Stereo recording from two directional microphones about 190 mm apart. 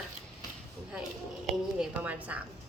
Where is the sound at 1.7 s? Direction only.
10° right (ahead or behind).